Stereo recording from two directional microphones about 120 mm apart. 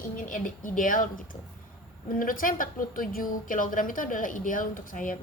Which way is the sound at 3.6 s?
90° left.